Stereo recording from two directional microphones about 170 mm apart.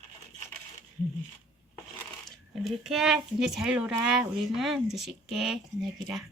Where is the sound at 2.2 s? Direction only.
Centre (ahead or behind).